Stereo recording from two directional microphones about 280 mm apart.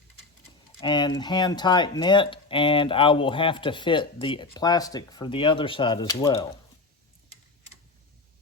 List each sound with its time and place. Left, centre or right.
0.8 s speech: centre